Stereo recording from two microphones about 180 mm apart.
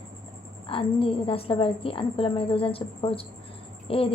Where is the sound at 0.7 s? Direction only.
30° left (ahead or behind).